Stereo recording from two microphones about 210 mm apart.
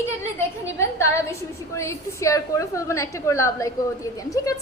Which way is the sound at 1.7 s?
15° left (ahead or behind).